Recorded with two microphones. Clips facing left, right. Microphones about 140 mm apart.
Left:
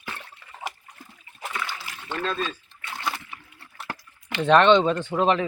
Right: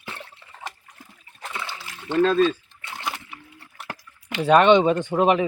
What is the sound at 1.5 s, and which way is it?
Splash, 25° right (ahead or behind).